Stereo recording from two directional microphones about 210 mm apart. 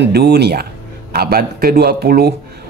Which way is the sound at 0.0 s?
50° right (ahead or behind).